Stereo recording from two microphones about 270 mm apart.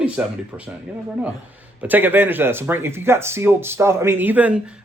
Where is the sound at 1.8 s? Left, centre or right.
Centre.